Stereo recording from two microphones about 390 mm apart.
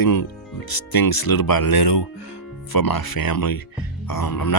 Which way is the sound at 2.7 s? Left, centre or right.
Left.